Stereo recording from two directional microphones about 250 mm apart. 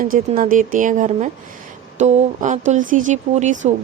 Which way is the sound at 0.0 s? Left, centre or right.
Right.